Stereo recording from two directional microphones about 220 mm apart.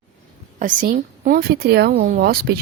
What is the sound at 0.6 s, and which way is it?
Speech, 35° right (ahead or behind).